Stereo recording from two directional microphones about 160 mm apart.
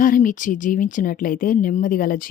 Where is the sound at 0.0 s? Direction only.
55° left (ahead or behind).